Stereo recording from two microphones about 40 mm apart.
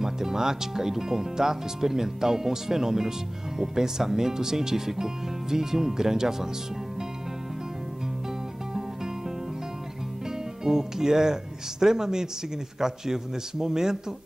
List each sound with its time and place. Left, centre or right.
0.0 s speech: centre
10.6 s speech: centre